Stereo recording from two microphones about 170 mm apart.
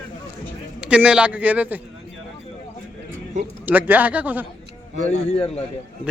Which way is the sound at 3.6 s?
10° right (ahead or behind).